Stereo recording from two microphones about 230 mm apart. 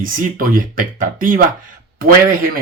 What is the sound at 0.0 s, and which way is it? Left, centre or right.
Speech, right.